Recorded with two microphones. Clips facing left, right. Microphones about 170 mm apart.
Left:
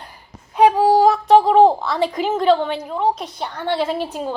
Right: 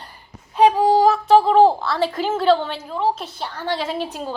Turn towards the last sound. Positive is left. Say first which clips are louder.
# left 3 dB
turn(degrees=10)  # may be behind; listen again after turning